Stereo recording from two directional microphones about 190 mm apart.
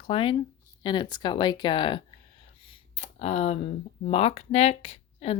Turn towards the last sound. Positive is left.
turn(degrees=30)  # may be behind; listen again after turning